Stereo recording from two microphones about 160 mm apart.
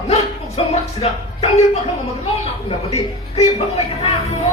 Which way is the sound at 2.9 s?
40° left (ahead or behind).